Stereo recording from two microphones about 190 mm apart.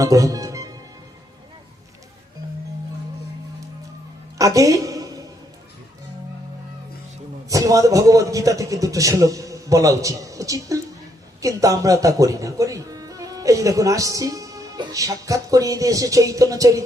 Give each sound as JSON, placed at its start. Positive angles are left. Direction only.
{"t": 0.0, "sound": "music", "side_deg": -20}
{"t": 4.4, "sound": "a sound", "side_deg": -15}
{"t": 7.5, "sound": "a man's voice", "side_deg": -15}